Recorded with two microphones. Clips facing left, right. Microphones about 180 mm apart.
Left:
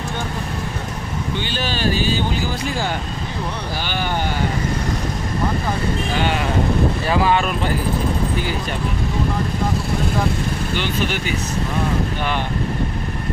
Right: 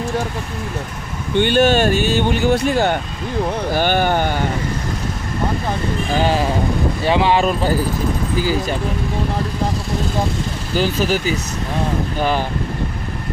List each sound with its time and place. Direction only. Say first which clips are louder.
1.3 s speech: right 13 dB; 60° right (ahead or behind)
3.7 s speech: right 8 dB; 50° right (ahead or behind)
7.1 s speech: right 5 dB; 30° right (ahead or behind)
10.7 s speech: right 8 dB; 40° right (ahead or behind)